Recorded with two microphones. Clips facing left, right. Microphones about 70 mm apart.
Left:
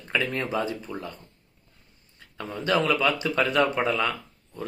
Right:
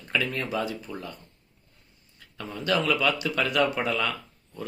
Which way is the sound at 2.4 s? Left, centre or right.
Left.